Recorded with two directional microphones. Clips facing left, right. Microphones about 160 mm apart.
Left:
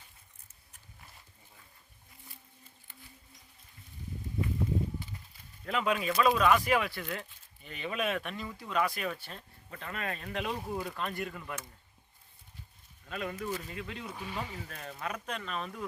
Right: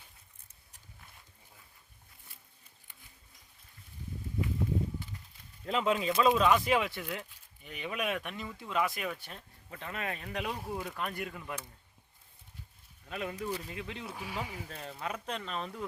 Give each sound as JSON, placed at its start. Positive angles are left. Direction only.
{"t": 5.6, "sound": "speech", "side_deg": -25}
{"t": 10.2, "sound": "speech", "side_deg": -5}
{"t": 13.1, "sound": "speech", "side_deg": -15}
{"t": 14.0, "sound": "speech", "side_deg": -5}
{"t": 14.7, "sound": "speech", "side_deg": -25}